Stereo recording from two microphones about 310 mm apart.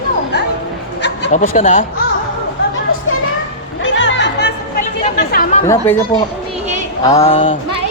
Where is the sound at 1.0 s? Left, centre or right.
Left.